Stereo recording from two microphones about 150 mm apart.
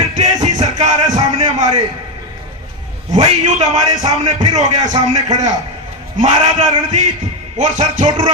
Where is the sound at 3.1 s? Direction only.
55° right (ahead or behind).